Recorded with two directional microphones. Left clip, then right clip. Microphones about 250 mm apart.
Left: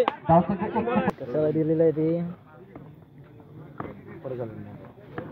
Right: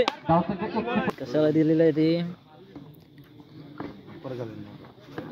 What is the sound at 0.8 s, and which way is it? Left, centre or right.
Speech, right.